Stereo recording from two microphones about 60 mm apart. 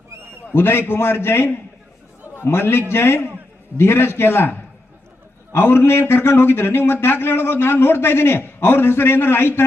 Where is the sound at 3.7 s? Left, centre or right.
Left.